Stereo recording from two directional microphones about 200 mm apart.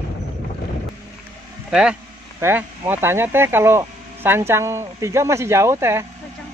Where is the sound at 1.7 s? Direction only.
5° right (ahead or behind).